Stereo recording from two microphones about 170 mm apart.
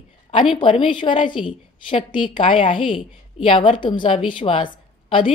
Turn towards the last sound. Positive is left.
turn(degrees=30)  # may be behind; listen again after turning